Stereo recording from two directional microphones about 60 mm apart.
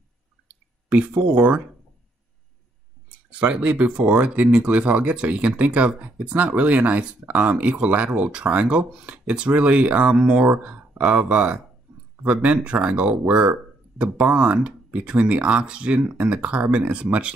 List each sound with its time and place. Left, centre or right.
0.8 s speech: right
3.3 s speech: centre